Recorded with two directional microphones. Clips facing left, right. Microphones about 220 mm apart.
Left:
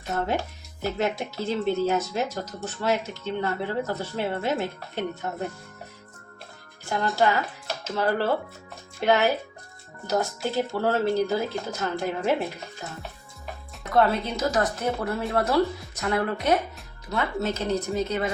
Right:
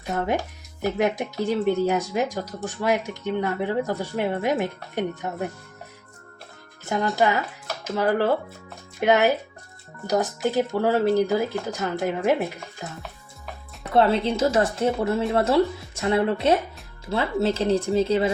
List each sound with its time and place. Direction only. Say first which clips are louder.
0.0 s speech: right 2 dB; centre (ahead or behind)
0.3 s speech: right 2 dB; 15° right (ahead or behind)
6.8 s speech: right 2 dB; 15° right (ahead or behind)
13.9 s a woman's voice: right 3 dB; 30° right (ahead or behind)